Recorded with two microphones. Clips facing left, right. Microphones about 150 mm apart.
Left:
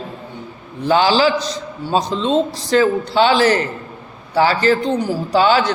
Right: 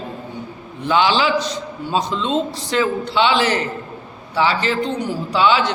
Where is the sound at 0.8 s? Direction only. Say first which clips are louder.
Left 3 dB; 40° left (ahead or behind).